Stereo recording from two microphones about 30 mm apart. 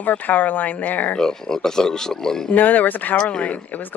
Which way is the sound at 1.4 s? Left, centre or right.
Centre.